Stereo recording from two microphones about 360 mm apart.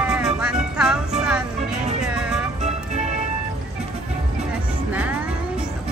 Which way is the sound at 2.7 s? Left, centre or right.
Centre.